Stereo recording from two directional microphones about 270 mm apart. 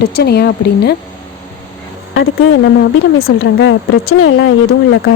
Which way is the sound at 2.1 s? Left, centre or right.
Left.